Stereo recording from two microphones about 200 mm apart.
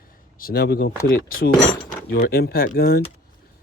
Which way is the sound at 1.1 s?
45° left (ahead or behind).